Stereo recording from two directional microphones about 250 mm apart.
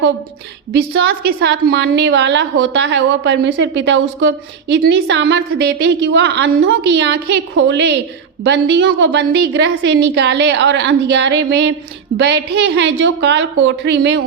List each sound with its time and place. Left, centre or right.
0.7 s a woman's voice: right